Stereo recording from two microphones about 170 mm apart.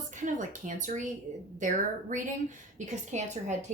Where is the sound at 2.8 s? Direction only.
45° right (ahead or behind).